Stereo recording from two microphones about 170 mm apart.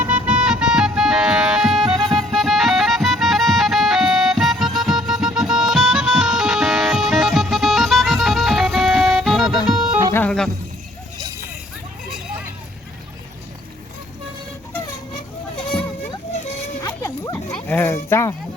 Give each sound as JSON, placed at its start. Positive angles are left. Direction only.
{"t": 0.0, "sound": "music", "side_deg": -10}
{"t": 10.1, "sound": "music", "side_deg": 10}
{"t": 16.8, "sound": "a sound", "side_deg": 20}
{"t": 17.7, "sound": "sheep", "side_deg": 15}